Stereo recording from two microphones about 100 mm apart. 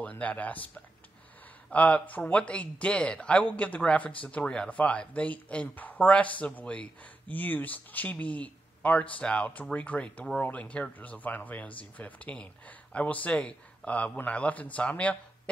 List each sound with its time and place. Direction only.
0.0 s speech: 15° left (ahead or behind)
1.7 s speech: 15° left (ahead or behind)